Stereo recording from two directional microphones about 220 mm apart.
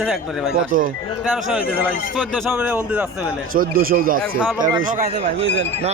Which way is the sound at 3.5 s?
40° right (ahead or behind).